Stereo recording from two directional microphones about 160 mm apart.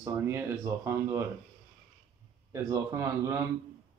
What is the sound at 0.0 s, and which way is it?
Speech, 15° right (ahead or behind).